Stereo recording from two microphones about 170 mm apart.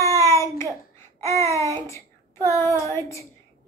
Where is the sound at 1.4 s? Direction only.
15° left (ahead or behind).